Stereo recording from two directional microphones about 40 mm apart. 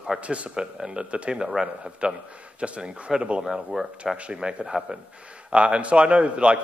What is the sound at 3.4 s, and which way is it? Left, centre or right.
Speech, centre.